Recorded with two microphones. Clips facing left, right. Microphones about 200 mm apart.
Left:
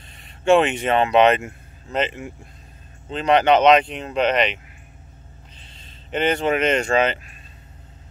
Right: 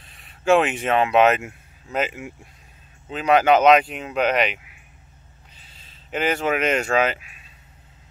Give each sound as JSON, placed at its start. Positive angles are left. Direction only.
{"t": 0.0, "sound": "speech", "side_deg": 0}